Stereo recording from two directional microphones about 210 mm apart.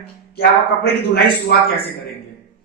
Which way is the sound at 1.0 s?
50° left (ahead or behind).